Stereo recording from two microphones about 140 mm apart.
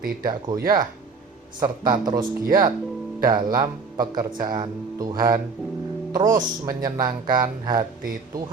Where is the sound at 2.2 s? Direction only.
90° right.